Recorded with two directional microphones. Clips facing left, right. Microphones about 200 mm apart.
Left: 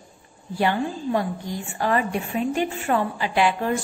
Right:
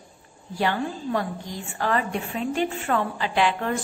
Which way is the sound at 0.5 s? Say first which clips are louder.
Left 2 dB; 15° left (ahead or behind).